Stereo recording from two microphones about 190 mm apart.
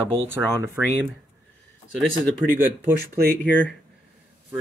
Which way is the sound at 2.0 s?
Centre (ahead or behind).